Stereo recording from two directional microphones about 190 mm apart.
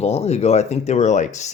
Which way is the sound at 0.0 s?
35° left (ahead or behind).